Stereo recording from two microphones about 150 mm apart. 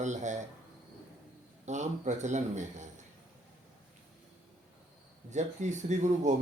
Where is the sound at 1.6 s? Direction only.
50° right (ahead or behind).